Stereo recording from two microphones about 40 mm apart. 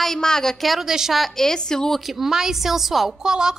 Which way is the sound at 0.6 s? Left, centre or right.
Centre.